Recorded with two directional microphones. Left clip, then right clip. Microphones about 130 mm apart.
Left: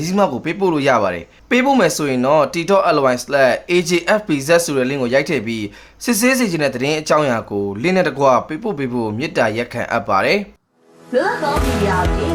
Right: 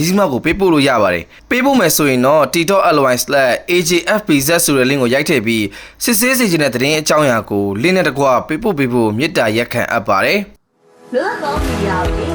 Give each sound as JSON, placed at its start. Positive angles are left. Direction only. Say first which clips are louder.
{"t": 0.0, "sound": "speech", "louder": "right 3 dB", "side_deg": -30}
{"t": 11.1, "sound": "a woman's voice", "louder": "even", "side_deg": 0}